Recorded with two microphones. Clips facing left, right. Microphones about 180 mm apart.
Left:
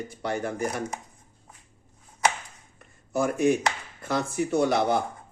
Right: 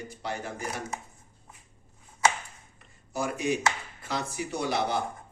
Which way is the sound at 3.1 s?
55° left (ahead or behind).